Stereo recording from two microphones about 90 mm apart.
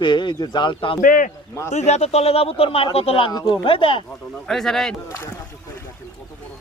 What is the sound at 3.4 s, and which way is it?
Speech, 70° left (ahead or behind).